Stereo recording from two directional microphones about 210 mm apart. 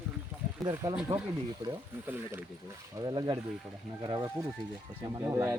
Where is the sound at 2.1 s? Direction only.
10° right (ahead or behind).